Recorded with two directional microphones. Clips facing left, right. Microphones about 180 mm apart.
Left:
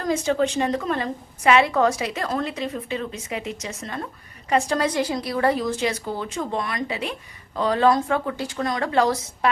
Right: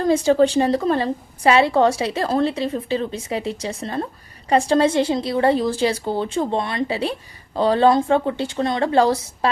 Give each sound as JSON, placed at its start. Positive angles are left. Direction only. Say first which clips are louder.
{"t": 0.0, "sound": "a woman's voice", "louder": "right 6 dB", "side_deg": -30}